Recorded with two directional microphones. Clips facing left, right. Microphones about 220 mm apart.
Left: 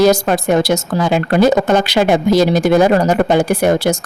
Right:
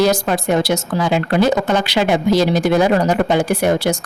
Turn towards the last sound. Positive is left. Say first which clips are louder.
# left 3 dB
turn(degrees=45)  # may be behind; listen again after turning